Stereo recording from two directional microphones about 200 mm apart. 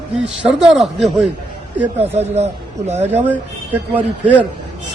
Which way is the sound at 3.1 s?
10° right (ahead or behind).